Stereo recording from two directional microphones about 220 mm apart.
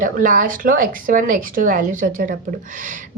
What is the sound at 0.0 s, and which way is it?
A woman's voice, 40° right (ahead or behind).